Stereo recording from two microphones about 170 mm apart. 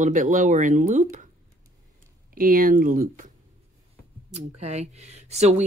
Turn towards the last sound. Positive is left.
turn(degrees=-40)  # may be behind; listen again after turning